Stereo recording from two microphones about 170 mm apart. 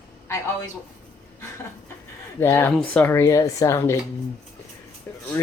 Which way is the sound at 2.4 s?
15° left (ahead or behind).